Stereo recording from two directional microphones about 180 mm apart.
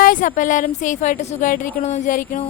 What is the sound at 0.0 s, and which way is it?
A woman's voice, 45° left (ahead or behind).